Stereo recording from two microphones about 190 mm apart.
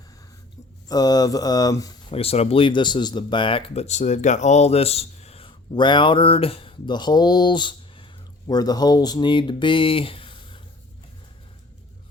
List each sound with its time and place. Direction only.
0.9 s speech: 20° left (ahead or behind)
2.1 s speech: 35° left (ahead or behind)